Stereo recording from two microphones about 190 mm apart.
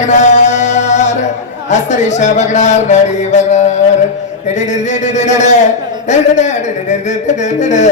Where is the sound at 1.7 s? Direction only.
40° left (ahead or behind).